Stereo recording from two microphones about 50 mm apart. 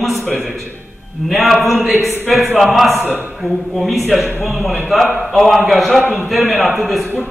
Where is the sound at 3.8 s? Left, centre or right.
Centre.